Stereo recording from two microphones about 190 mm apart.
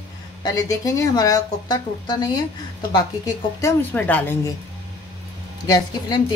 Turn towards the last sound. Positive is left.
turn(degrees=20)  # may be behind; listen again after turning